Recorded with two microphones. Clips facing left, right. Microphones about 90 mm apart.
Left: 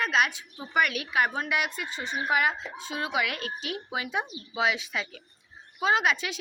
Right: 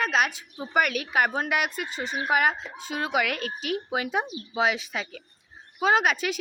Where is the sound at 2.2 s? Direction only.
50° right (ahead or behind).